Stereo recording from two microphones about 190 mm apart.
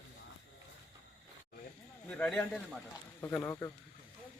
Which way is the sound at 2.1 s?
5° left (ahead or behind).